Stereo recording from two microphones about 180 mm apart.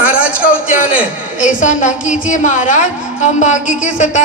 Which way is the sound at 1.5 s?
45° left (ahead or behind).